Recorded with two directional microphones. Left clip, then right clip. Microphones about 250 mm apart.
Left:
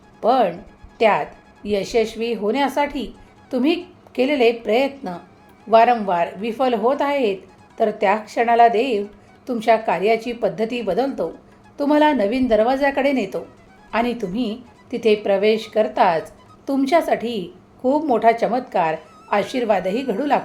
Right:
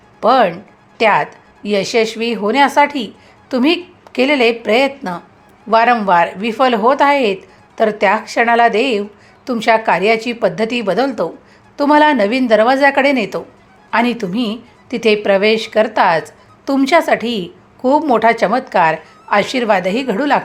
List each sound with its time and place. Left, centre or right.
0.2 s a woman's voice: centre